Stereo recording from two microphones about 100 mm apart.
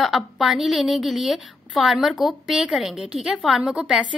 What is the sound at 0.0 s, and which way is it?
A woman's voice, centre (ahead or behind).